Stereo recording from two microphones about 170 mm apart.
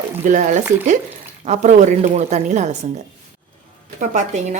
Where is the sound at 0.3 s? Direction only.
50° right (ahead or behind).